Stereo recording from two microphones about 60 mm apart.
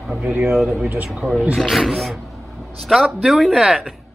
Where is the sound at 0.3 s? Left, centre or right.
Right.